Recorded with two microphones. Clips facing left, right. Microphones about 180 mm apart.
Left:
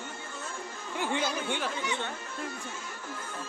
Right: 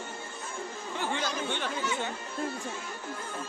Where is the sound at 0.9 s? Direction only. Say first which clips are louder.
Left 2 dB; 10° left (ahead or behind).